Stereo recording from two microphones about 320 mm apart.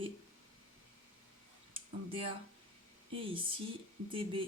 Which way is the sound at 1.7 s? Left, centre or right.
Centre.